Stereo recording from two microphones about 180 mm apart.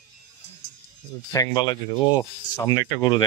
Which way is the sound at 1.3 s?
20° left (ahead or behind).